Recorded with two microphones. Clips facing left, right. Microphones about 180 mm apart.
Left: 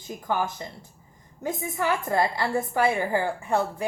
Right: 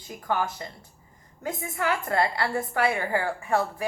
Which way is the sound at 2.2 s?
25° left (ahead or behind).